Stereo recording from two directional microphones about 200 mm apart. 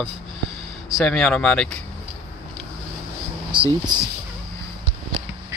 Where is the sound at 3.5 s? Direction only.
25° right (ahead or behind).